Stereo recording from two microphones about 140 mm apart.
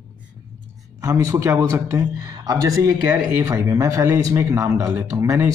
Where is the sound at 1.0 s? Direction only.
20° right (ahead or behind).